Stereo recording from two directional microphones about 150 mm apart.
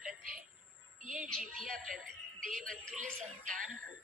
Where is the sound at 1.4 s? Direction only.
Centre (ahead or behind).